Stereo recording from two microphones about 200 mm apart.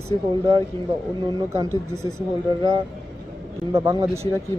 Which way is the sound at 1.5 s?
15° right (ahead or behind).